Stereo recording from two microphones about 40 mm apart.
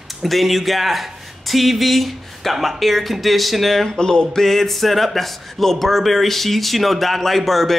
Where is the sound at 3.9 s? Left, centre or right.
Centre.